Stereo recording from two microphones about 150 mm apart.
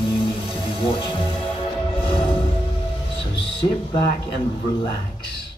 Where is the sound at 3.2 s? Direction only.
40° left (ahead or behind).